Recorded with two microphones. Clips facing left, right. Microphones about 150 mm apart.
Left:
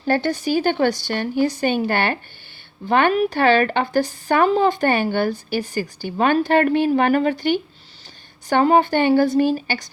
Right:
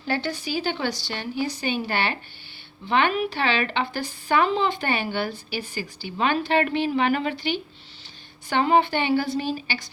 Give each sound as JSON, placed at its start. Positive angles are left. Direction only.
{"t": 0.0, "sound": "speech", "side_deg": 45}